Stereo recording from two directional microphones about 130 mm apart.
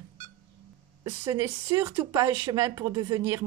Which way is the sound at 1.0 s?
20° right (ahead or behind).